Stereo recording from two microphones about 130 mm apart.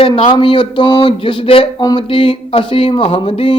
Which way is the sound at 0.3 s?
40° left (ahead or behind).